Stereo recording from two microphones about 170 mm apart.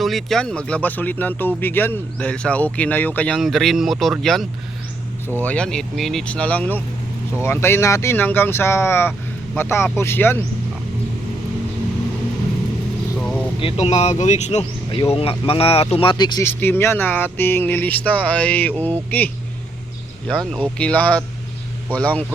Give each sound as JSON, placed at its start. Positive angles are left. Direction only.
{"t": 0.0, "sound": "speech", "side_deg": 0}
{"t": 13.1, "sound": "vehicle", "side_deg": 5}
{"t": 13.6, "sound": "speech", "side_deg": 35}
{"t": 14.8, "sound": "speech", "side_deg": 30}
{"t": 16.5, "sound": "speech", "side_deg": 10}